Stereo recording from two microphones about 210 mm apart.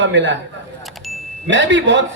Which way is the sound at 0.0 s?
60° right (ahead or behind).